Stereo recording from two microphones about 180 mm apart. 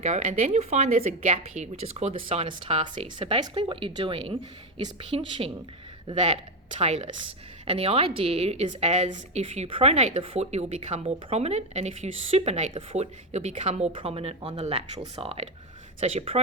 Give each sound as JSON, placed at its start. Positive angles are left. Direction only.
{"t": 0.0, "sound": "a woman's voice", "side_deg": -40}